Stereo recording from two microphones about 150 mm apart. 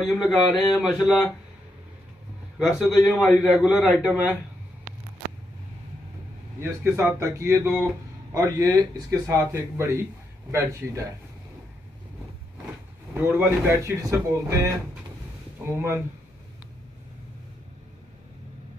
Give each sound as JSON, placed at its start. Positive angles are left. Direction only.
{"t": 0.3, "sound": "a man's voice", "side_deg": 5}
{"t": 2.6, "sound": "a man's voice", "side_deg": 5}
{"t": 6.6, "sound": "a man's voice", "side_deg": -15}
{"t": 13.1, "sound": "a man's voice", "side_deg": -15}